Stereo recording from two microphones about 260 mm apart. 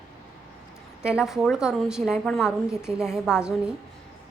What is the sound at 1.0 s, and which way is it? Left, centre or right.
A woman's voice, centre.